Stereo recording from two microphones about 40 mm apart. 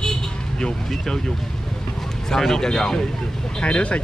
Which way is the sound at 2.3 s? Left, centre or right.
Centre.